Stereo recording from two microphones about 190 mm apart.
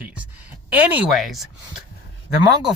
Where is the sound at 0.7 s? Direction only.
10° right (ahead or behind).